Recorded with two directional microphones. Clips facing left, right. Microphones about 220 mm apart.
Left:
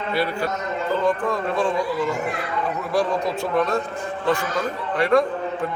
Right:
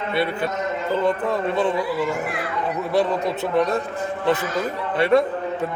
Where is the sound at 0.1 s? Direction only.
25° right (ahead or behind).